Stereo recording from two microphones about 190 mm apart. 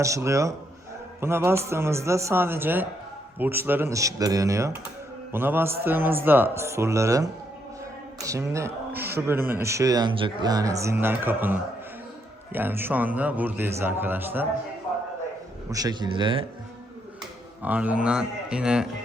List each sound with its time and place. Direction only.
0.0 s speech: 15° right (ahead or behind)
9.0 s a man's voice: 55° right (ahead or behind)
9.2 s speech: 10° right (ahead or behind)
15.7 s speech: 20° right (ahead or behind)
17.6 s speech: 10° right (ahead or behind)